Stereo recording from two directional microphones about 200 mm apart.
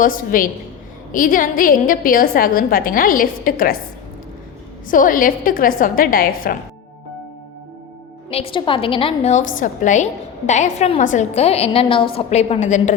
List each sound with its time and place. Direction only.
0.0 s a woman's voice: 45° left (ahead or behind)
4.9 s a woman's voice: 45° left (ahead or behind)
8.3 s a woman's voice: 30° left (ahead or behind)